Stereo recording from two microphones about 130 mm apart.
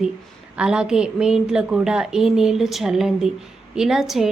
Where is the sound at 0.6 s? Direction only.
5° right (ahead or behind).